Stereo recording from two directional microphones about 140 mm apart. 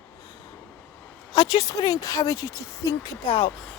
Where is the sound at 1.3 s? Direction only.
30° left (ahead or behind).